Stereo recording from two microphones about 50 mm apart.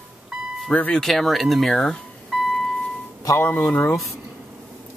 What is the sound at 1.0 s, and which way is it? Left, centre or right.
Speech, centre.